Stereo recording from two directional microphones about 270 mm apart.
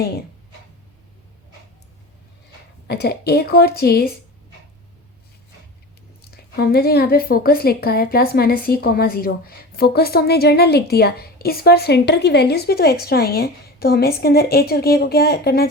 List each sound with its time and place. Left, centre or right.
2.8 s a woman's voice: left
6.3 s a woman's voice: left